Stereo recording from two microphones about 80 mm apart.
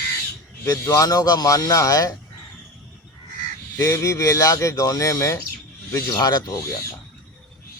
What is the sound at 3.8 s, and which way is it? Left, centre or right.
Speech, left.